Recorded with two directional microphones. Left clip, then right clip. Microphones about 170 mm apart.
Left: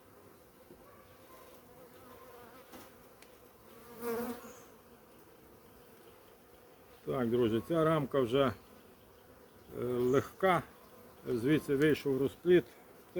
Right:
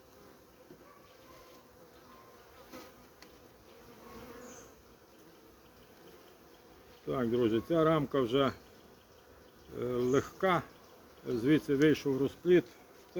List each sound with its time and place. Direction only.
7.1 s speech: 10° left (ahead or behind)
9.7 s speech: 10° left (ahead or behind)